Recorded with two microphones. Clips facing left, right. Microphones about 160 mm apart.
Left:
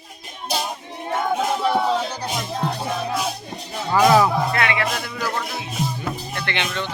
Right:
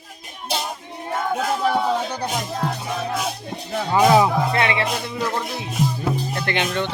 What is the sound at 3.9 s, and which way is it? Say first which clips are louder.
Music: even; 15° right (ahead or behind).